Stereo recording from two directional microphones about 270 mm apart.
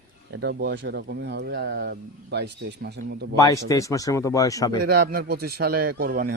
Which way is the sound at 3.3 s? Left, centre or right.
Centre.